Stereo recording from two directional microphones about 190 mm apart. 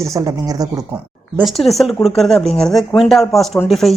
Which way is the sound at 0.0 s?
15° right (ahead or behind).